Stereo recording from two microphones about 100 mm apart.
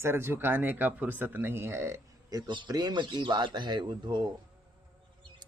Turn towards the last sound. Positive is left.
turn(degrees=-45)  # may be behind; listen again after turning